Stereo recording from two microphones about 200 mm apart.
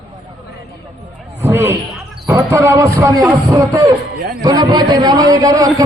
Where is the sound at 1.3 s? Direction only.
10° right (ahead or behind).